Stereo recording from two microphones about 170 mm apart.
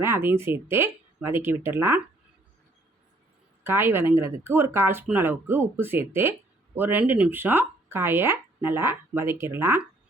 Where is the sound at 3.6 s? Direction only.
15° right (ahead or behind).